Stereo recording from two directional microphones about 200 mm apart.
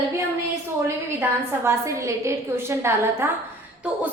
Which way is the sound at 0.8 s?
10° right (ahead or behind).